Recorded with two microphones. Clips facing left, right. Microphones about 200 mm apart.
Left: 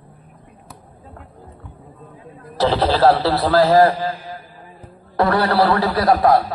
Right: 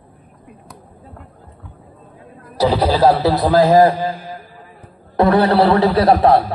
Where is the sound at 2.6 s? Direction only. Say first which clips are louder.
Right 1 dB; 15° right (ahead or behind).